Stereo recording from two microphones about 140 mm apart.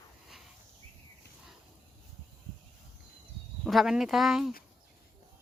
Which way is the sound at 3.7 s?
Centre (ahead or behind).